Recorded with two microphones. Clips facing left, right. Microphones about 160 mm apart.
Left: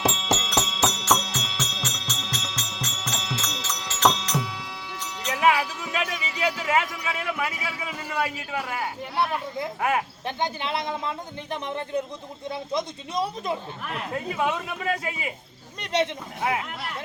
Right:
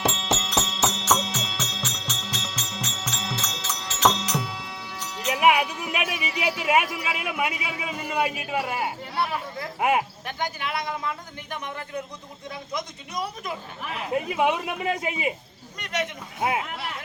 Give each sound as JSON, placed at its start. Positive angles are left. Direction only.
{"t": 0.0, "sound": "music", "side_deg": 0}
{"t": 9.8, "sound": "speech", "side_deg": -20}
{"t": 10.2, "sound": "speech", "side_deg": 25}
{"t": 14.1, "sound": "speech", "side_deg": -20}
{"t": 15.8, "sound": "speech", "side_deg": 30}